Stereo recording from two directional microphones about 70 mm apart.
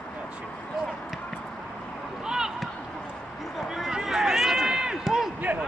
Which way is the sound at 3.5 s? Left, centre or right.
Centre.